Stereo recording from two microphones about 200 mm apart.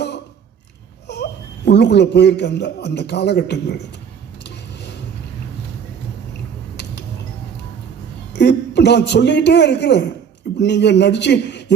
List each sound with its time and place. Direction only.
1.0 s a man's voice: 55° left (ahead or behind)
8.3 s a man's voice: 60° left (ahead or behind)